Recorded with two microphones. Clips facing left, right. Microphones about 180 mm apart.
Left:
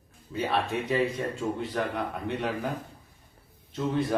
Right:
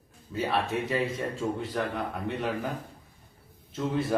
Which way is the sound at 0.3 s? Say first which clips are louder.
Even; centre (ahead or behind).